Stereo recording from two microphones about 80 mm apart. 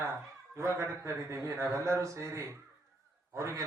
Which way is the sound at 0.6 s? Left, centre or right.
Right.